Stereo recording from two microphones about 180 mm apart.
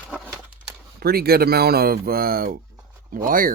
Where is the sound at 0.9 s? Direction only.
60° right (ahead or behind).